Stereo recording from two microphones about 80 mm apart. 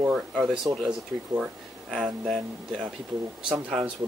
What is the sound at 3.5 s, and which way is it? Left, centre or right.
Speech, centre.